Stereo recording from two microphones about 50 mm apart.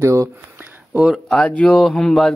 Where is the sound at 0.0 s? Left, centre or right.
Right.